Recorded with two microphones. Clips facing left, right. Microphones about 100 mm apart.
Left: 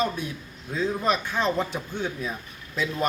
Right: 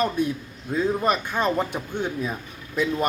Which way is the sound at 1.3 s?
10° right (ahead or behind).